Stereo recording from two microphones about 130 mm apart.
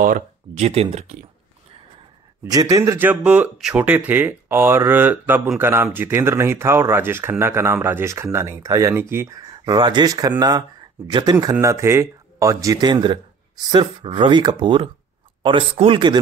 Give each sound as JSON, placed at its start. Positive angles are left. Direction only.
{"t": 0.0, "sound": "speech", "side_deg": -90}
{"t": 0.7, "sound": "speech", "side_deg": -50}
{"t": 2.4, "sound": "speech", "side_deg": -30}
{"t": 9.4, "sound": "speech", "side_deg": -30}
{"t": 11.6, "sound": "speech", "side_deg": -20}